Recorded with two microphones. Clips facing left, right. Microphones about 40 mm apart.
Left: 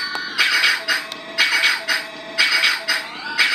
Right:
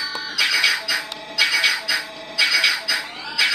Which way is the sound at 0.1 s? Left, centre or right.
Centre.